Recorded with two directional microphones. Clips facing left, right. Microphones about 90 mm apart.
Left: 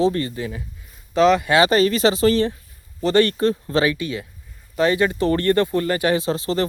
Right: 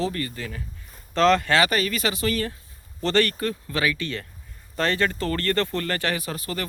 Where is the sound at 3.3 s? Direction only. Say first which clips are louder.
Left 8 dB; 30° left (ahead or behind).